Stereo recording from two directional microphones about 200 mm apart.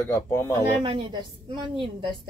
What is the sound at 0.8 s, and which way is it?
A woman's voice, 25° right (ahead or behind).